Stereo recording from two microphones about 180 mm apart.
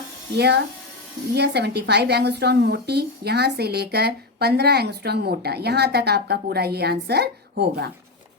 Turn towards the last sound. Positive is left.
turn(degrees=-65)  # may be behind; listen again after turning